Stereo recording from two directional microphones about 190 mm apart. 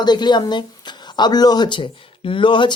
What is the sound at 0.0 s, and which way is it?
Speech, 20° left (ahead or behind).